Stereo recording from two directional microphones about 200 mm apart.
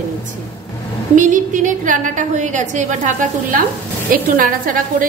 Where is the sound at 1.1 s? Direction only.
40° right (ahead or behind).